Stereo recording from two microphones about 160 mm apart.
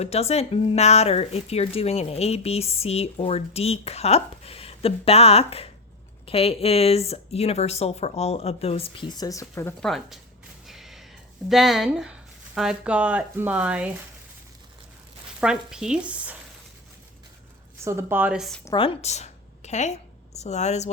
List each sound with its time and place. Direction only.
0.0 s speech: 40° left (ahead or behind); by 9.7 s 20° left (ahead or behind)
9.8 s speech: centre (ahead or behind)
15.4 s speech: 5° right (ahead or behind)
17.8 s speech: 15° right (ahead or behind)
18.6 s a woman's voice: 30° left (ahead or behind)